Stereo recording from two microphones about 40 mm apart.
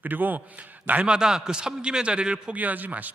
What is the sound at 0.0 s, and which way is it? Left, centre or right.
A man's voice, right.